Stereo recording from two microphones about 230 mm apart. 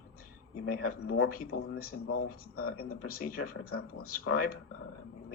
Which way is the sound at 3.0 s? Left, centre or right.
Left.